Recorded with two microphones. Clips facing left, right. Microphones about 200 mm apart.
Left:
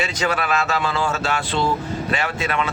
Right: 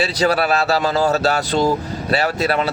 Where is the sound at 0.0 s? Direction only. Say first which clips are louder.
Right 5 dB; 35° right (ahead or behind).